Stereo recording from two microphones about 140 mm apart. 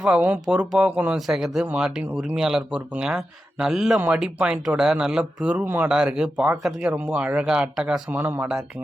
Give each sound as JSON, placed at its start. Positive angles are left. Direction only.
{"t": 0.0, "sound": "speech", "side_deg": -10}